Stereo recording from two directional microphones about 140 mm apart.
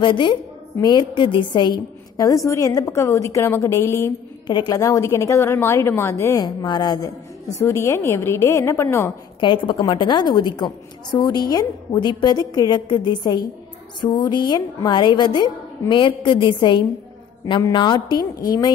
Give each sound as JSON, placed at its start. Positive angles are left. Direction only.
{"t": 0.0, "sound": "a woman's voice", "side_deg": 35}
{"t": 4.5, "sound": "a woman's voice", "side_deg": 30}
{"t": 6.4, "sound": "a woman's voice", "side_deg": 30}
{"t": 9.4, "sound": "a woman's voice", "side_deg": 35}